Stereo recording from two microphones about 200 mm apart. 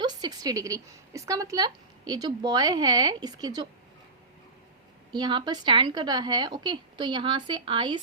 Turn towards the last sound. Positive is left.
turn(degrees=-25)  # may be behind; listen again after turning